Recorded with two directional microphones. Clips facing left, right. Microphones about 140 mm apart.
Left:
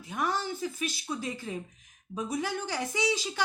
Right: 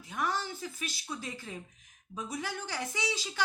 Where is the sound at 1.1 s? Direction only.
15° left (ahead or behind).